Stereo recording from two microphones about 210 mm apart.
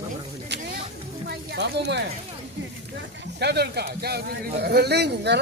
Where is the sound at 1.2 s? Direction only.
50° right (ahead or behind).